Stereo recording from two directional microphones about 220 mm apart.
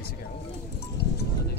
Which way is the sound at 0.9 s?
45° left (ahead or behind).